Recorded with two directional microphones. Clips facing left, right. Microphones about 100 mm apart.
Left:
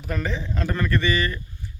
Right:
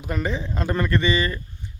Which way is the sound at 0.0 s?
15° right (ahead or behind).